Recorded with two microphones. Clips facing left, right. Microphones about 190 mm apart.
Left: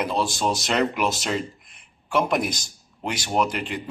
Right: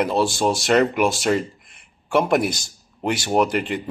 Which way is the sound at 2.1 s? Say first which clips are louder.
Right 4 dB; 60° right (ahead or behind).